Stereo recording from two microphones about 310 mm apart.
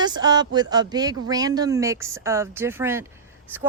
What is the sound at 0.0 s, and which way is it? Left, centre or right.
Speech, centre.